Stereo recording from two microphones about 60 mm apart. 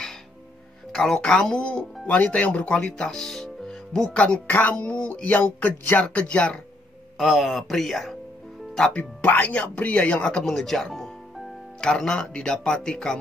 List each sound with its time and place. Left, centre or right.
0.9 s speech: centre
3.1 s speech: centre
7.2 s speech: centre
8.9 s speech: left
10.4 s music: centre
11.8 s speech: centre